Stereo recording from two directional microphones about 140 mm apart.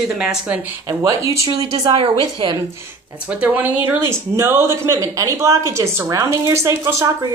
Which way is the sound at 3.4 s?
10° right (ahead or behind).